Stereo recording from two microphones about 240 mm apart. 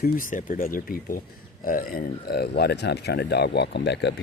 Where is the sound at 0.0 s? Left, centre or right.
Left.